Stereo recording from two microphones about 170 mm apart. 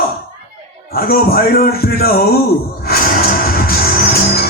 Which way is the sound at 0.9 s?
60° left (ahead or behind).